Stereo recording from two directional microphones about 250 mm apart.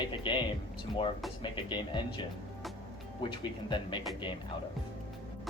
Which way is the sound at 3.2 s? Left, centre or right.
Centre.